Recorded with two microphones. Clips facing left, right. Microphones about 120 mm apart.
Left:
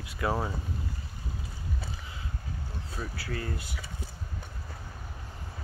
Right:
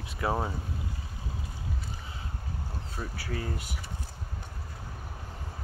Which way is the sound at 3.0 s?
25° right (ahead or behind).